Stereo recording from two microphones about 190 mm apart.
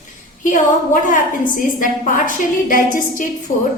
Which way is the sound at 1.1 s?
45° left (ahead or behind).